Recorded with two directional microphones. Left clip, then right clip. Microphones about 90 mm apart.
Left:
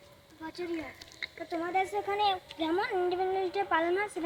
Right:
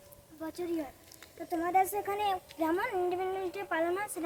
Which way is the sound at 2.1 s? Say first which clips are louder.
Left 4 dB; 15° right (ahead or behind).